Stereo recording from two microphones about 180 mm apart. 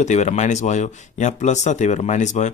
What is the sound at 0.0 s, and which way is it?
Speech, 40° left (ahead or behind).